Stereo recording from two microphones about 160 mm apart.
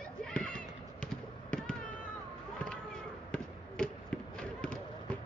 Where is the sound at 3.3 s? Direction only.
5° left (ahead or behind).